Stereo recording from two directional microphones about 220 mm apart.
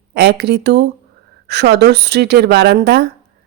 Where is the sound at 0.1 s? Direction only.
50° right (ahead or behind).